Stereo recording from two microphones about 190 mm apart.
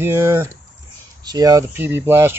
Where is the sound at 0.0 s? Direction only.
10° right (ahead or behind).